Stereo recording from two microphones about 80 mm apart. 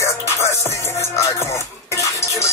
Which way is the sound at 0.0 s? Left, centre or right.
Left.